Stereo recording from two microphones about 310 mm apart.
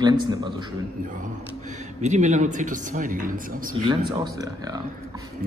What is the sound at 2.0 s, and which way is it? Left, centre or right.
Speech, right.